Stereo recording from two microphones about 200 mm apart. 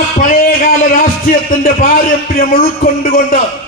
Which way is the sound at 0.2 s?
45° left (ahead or behind).